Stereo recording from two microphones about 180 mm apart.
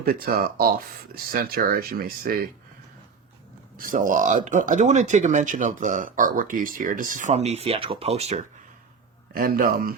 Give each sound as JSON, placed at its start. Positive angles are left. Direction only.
{"t": 0.0, "sound": "speech", "side_deg": -55}
{"t": 3.8, "sound": "speech", "side_deg": -50}
{"t": 9.3, "sound": "speech", "side_deg": -55}